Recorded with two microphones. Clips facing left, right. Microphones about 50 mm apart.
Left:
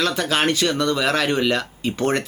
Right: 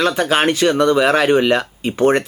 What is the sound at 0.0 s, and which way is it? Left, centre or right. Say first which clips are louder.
Speech: right 5 dB; right.